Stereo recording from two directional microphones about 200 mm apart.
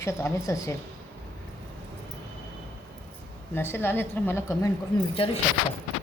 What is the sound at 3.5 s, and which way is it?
A woman's voice, 10° left (ahead or behind).